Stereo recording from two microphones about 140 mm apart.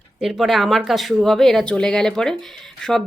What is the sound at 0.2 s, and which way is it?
Speech, centre (ahead or behind).